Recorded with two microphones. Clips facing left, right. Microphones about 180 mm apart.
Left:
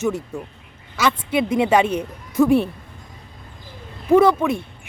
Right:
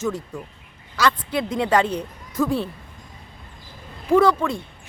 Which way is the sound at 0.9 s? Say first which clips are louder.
Left 2 dB; 20° left (ahead or behind).